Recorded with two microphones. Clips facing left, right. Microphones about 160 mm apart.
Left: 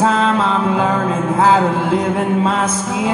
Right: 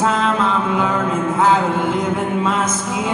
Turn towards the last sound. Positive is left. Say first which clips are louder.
# left 3 dB
turn(degrees=35)  # may be behind; listen again after turning